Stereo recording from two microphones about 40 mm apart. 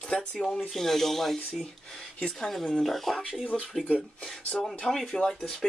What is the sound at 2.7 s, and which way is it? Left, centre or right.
Speech, centre.